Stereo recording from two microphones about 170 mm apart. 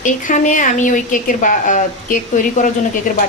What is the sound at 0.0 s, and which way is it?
A woman's voice, 50° left (ahead or behind).